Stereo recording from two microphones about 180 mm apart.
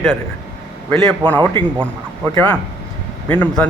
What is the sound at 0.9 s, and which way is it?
Speech, 10° left (ahead or behind).